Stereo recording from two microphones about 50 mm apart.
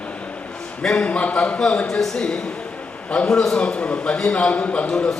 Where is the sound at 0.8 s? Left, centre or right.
Centre.